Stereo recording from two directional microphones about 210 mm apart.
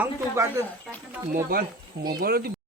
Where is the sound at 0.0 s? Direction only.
10° right (ahead or behind).